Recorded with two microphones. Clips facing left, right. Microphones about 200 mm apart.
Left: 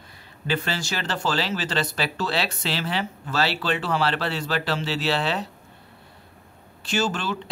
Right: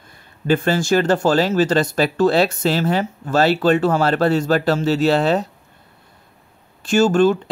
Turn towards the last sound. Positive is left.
turn(degrees=-50)  # may be behind; listen again after turning